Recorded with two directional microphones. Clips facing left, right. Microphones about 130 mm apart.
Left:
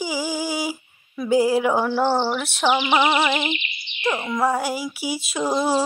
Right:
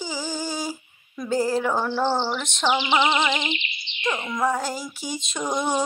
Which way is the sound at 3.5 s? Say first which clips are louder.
Left 3 dB; 20° right (ahead or behind).